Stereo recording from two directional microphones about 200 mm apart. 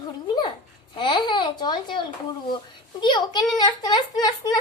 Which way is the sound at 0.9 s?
25° left (ahead or behind).